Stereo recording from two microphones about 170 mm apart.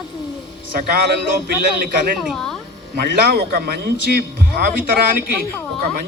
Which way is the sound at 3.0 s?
65° right (ahead or behind).